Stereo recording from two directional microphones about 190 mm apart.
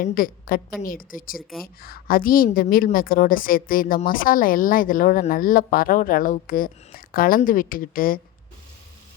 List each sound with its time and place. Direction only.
0.0 s a woman's voice: 50° left (ahead or behind)